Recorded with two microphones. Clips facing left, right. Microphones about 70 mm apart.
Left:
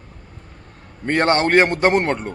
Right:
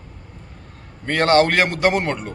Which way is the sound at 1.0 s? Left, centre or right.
Left.